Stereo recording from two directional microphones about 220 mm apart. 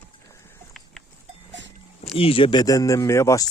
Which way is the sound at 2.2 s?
25° left (ahead or behind).